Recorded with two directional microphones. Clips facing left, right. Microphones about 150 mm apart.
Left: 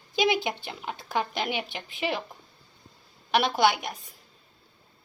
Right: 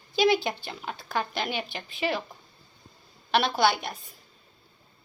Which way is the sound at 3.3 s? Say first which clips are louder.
Left 1 dB; 10° left (ahead or behind).